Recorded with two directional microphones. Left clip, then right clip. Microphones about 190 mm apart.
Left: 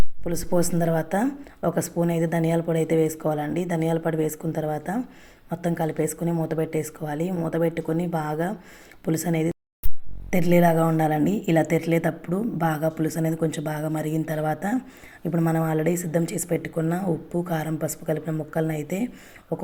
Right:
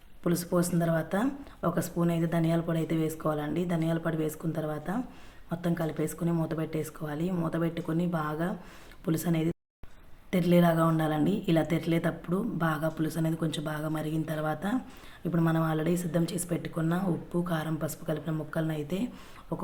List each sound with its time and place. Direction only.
0.3 s speech: 15° left (ahead or behind)